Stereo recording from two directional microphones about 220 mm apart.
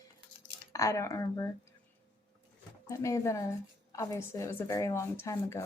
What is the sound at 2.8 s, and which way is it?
Speech, 15° left (ahead or behind).